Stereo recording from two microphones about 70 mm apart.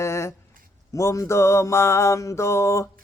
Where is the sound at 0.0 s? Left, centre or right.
Left.